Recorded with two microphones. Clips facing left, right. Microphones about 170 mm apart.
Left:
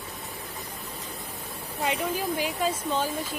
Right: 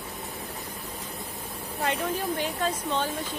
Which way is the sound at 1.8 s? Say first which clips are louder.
Even; 10° left (ahead or behind).